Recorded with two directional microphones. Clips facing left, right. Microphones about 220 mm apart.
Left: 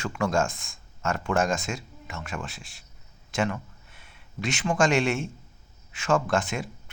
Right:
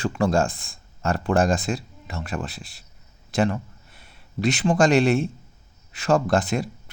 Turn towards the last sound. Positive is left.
turn(degrees=-35)  # may be behind; listen again after turning